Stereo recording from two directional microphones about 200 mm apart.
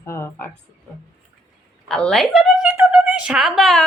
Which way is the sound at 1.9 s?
5° left (ahead or behind).